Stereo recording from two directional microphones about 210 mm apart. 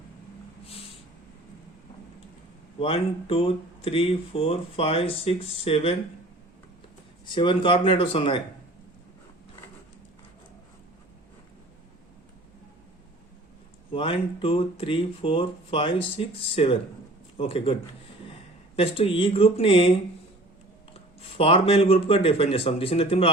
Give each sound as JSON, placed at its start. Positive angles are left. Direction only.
{"t": 0.6, "sound": "a sound", "side_deg": 25}
{"t": 2.7, "sound": "speech", "side_deg": 25}
{"t": 7.3, "sound": "speech", "side_deg": 20}
{"t": 13.9, "sound": "a man's voice", "side_deg": 25}
{"t": 18.8, "sound": "speech", "side_deg": 25}
{"t": 21.2, "sound": "speech", "side_deg": 30}